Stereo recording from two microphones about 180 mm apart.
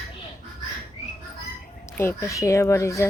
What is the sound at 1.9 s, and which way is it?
Speech, 10° left (ahead or behind).